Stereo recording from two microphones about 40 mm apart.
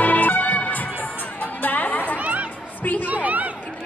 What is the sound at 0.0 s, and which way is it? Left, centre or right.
Music, left.